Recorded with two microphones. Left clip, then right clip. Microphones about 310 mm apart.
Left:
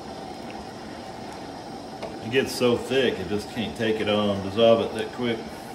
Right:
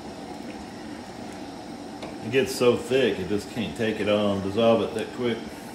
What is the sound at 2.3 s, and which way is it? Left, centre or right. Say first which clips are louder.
Speech: right 1 dB; centre.